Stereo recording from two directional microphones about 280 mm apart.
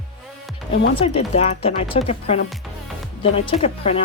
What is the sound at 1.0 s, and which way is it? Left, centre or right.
Speech, left.